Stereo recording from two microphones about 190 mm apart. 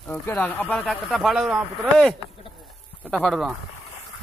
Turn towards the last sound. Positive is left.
turn(degrees=5)  # may be behind; listen again after turning